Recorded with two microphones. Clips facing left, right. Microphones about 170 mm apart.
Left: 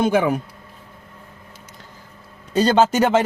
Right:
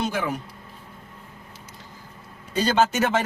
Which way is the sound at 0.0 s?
60° left (ahead or behind).